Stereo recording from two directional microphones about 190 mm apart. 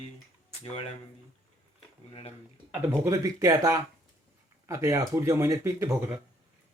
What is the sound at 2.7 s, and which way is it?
Speech, 15° right (ahead or behind).